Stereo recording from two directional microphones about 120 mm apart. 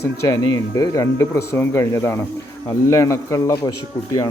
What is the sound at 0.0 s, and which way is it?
Speech, 25° left (ahead or behind).